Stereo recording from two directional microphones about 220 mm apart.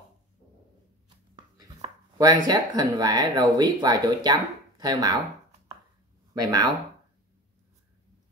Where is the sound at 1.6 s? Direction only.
20° right (ahead or behind).